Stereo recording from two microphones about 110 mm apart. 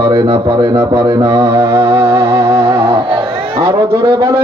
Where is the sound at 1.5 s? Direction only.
30° right (ahead or behind).